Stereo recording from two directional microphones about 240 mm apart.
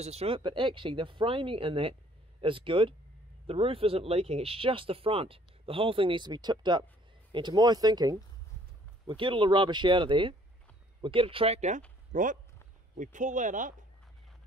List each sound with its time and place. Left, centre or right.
0.0 s speech: right